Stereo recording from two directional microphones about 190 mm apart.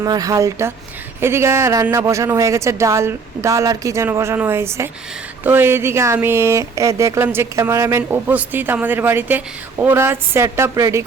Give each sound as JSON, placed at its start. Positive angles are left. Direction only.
{"t": 0.0, "sound": "speech", "side_deg": -20}